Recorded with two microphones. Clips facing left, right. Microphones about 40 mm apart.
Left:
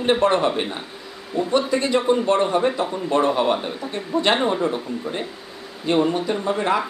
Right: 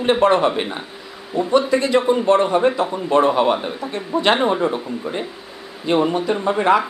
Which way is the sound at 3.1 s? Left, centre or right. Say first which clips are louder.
Right 4 dB; right.